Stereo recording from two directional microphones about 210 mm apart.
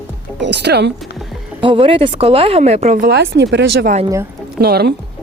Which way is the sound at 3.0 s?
55° right (ahead or behind).